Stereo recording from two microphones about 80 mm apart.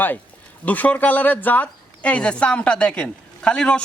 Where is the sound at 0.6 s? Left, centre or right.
Centre.